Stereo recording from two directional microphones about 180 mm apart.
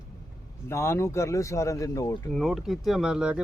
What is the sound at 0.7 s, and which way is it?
Speech, 15° left (ahead or behind).